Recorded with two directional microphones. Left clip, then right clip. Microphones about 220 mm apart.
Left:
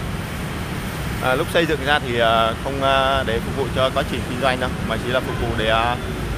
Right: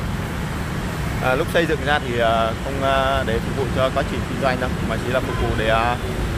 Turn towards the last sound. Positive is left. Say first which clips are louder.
# even
turn(degrees=5)  # may be behind; listen again after turning